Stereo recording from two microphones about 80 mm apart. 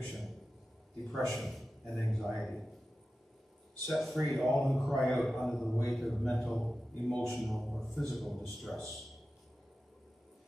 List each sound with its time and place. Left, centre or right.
0.0 s a sound: centre
1.0 s a man's voice: centre
3.8 s a man's voice: centre